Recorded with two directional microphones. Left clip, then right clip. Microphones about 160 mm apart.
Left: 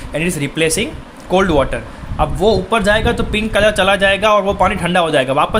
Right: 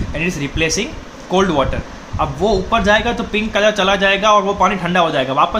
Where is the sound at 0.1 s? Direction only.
45° left (ahead or behind).